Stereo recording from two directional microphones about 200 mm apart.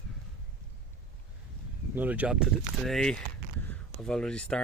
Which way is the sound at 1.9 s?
10° right (ahead or behind).